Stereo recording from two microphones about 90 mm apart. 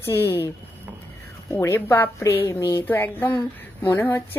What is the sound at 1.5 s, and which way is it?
A woman's voice, 30° left (ahead or behind).